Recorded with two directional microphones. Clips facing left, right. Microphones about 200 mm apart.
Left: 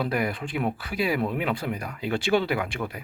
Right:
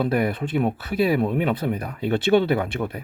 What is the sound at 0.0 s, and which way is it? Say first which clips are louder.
Speech: right 5 dB; 25° right (ahead or behind).